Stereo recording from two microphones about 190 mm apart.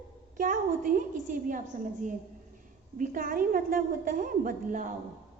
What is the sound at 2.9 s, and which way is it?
A woman's voice, 45° right (ahead or behind).